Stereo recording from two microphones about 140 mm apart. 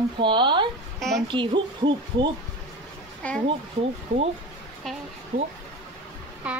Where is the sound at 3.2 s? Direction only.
10° left (ahead or behind).